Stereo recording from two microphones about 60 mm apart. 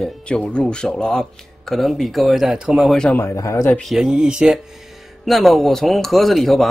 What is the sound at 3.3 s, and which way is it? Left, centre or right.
Speech, left.